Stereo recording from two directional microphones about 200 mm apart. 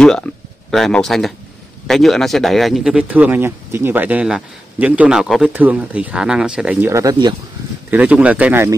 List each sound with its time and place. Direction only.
0.7 s speech: centre (ahead or behind); by 7.3 s 20° right (ahead or behind)
7.9 s speech: 5° right (ahead or behind)